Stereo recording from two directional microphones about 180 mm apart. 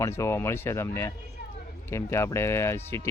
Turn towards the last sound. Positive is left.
turn(degrees=15)  # may be behind; listen again after turning